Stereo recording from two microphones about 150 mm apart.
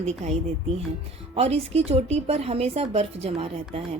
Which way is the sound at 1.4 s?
45° right (ahead or behind).